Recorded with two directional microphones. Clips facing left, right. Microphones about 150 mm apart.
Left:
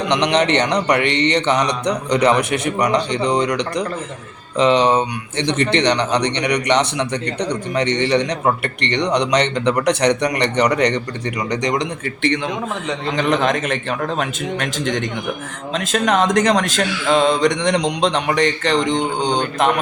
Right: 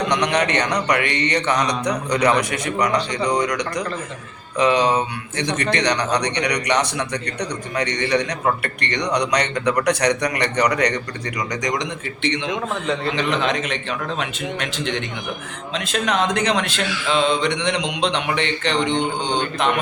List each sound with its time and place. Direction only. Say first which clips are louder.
0.1 s a man's voice: left 7 dB; 25° left (ahead or behind)
13.4 s speech: left 4 dB; 45° left (ahead or behind)